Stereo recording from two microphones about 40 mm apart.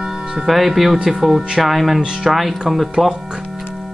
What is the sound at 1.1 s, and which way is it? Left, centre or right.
Speech, centre.